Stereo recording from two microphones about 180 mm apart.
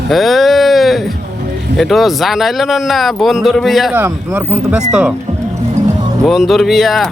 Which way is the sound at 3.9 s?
10° right (ahead or behind).